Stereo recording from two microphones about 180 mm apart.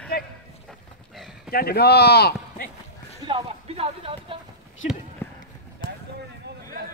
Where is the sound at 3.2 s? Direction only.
30° right (ahead or behind).